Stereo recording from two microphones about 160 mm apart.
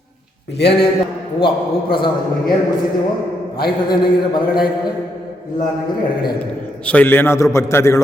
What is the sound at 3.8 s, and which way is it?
Speech, 30° left (ahead or behind).